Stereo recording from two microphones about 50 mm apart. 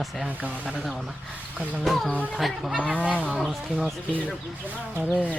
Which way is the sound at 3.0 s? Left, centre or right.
Right.